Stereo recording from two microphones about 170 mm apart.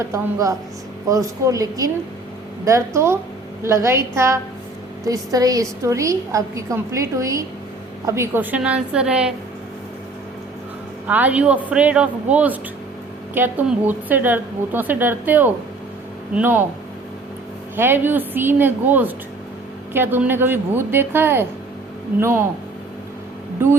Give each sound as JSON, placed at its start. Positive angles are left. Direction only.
{"t": 0.0, "sound": "a woman's voice", "side_deg": -20}
{"t": 11.1, "sound": "a woman's voice", "side_deg": -10}
{"t": 17.7, "sound": "a woman's voice", "side_deg": -10}